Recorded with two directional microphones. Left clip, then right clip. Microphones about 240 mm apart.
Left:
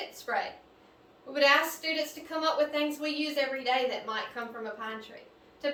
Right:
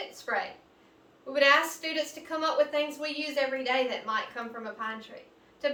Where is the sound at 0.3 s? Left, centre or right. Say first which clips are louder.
Right 1 dB; centre.